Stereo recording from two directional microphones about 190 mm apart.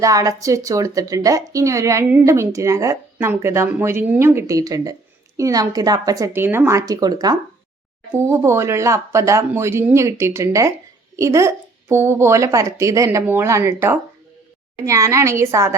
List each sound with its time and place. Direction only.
0.0 s a woman's voice: 15° right (ahead or behind)